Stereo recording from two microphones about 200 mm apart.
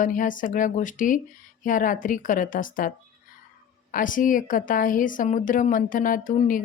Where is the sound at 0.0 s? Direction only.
40° left (ahead or behind).